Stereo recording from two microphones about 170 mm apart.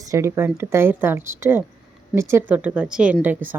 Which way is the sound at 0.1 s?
15° right (ahead or behind).